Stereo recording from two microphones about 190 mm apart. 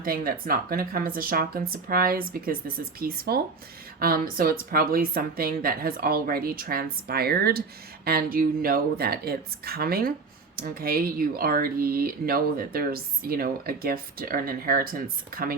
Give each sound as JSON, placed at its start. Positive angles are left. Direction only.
{"t": 0.0, "sound": "speech", "side_deg": -50}